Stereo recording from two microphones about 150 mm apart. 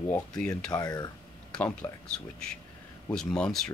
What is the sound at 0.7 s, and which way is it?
Speech, 25° left (ahead or behind).